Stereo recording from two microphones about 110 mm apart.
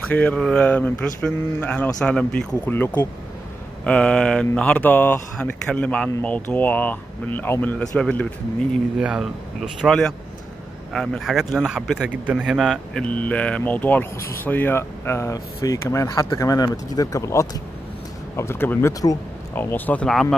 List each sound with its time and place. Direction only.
0.1 s speech: 15° left (ahead or behind)
7.8 s speech: 10° left (ahead or behind)
9.0 s speech: 5° right (ahead or behind)
12.5 s speech: centre (ahead or behind)
13.0 s speech: 10° left (ahead or behind)
20.1 s speech: 5° left (ahead or behind)